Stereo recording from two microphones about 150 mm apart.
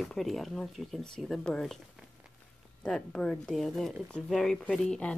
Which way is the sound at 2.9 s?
5° left (ahead or behind).